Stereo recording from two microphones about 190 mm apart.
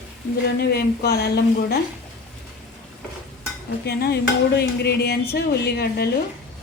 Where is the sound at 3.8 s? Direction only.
55° left (ahead or behind).